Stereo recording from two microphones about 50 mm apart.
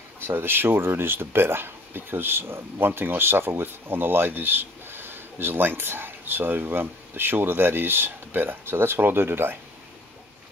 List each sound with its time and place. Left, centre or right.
0.2 s speech: right